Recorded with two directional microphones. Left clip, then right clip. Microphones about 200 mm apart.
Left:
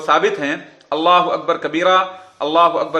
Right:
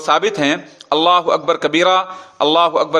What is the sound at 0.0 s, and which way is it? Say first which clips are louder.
A man's voice: right 1 dB; 40° right (ahead or behind).